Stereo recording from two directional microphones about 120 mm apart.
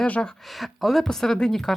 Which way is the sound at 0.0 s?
5° left (ahead or behind).